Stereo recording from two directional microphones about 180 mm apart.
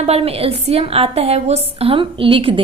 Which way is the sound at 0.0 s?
35° right (ahead or behind).